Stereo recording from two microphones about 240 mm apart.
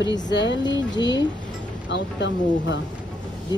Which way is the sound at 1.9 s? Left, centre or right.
Left.